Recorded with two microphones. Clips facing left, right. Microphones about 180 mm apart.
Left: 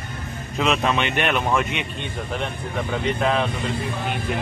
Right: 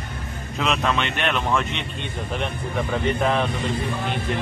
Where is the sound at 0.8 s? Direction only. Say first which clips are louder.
Left 1 dB; 15° left (ahead or behind).